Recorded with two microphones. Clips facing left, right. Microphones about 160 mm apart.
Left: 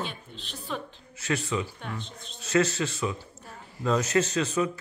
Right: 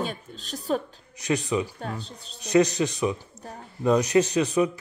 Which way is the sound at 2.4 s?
15° right (ahead or behind).